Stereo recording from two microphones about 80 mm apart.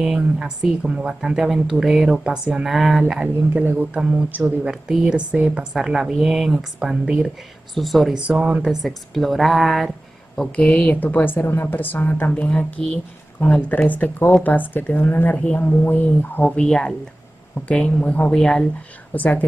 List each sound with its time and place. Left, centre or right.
0.0 s speech: centre
3.0 s speech: centre
3.6 s speech: right; by 8.2 s centre
8.2 s speech: centre
8.8 s speech: centre
10.4 s a woman's voice: centre
16.4 s a woman's voice: centre
19.1 s speech: centre